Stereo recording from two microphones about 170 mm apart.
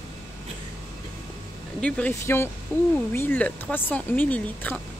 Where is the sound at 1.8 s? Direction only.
5° left (ahead or behind).